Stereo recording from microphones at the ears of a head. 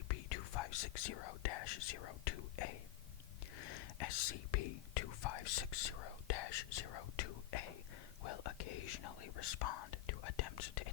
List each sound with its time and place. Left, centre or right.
0.1 s speech: left
8.2 s whispering: left